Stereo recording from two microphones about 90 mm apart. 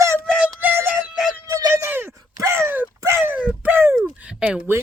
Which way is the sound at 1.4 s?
40° right (ahead or behind).